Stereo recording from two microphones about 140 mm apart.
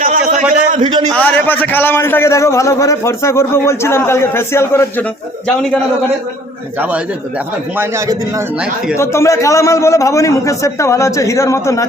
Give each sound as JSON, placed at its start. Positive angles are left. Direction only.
{"t": 0.0, "sound": "a sound", "side_deg": -75}
{"t": 0.8, "sound": "a man's voice", "side_deg": -30}
{"t": 1.1, "sound": "a man's voice", "side_deg": 15}
{"t": 7.8, "sound": "a man's voice", "side_deg": -20}
{"t": 9.0, "sound": "a man's voice", "side_deg": 20}